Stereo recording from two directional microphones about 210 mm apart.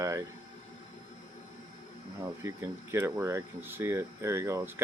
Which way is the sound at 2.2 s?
15° right (ahead or behind).